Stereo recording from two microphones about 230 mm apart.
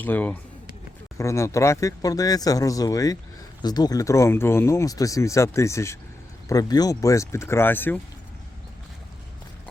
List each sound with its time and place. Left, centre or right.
0.0 s speech: centre